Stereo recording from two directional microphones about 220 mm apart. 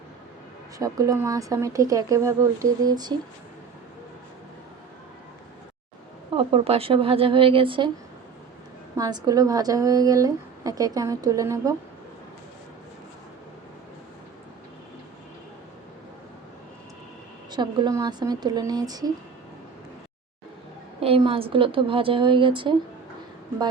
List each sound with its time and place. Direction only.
0.8 s a woman's voice: 15° right (ahead or behind)
6.3 s a woman's voice: 25° right (ahead or behind)
9.0 s a woman's voice: 15° right (ahead or behind)
17.5 s a woman's voice: 20° right (ahead or behind)
21.0 s a woman's voice: 25° right (ahead or behind)